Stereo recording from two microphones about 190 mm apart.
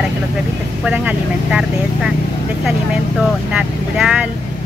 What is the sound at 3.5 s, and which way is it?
Speech, 5° right (ahead or behind).